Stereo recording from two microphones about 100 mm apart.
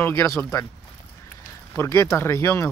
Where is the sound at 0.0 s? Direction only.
25° left (ahead or behind).